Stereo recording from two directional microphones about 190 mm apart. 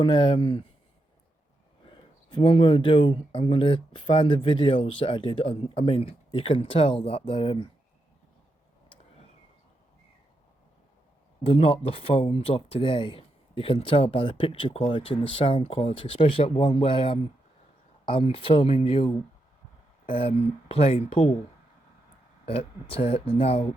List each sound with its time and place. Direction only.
0.0 s speech: 25° left (ahead or behind)
2.3 s speech: 25° left (ahead or behind)
11.4 s speech: 30° left (ahead or behind)
22.4 s speech: 30° left (ahead or behind)